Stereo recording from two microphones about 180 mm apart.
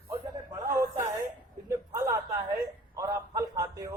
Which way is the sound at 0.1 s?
20° right (ahead or behind).